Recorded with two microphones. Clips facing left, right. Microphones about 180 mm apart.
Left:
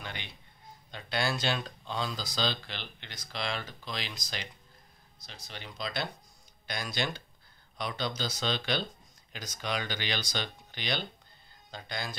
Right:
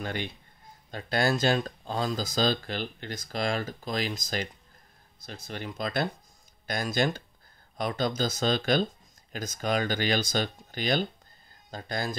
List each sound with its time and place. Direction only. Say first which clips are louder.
0.0 s a man's voice: right 10 dB; 45° right (ahead or behind)